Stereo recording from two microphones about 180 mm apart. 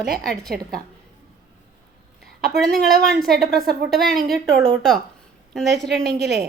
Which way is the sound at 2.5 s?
Centre (ahead or behind).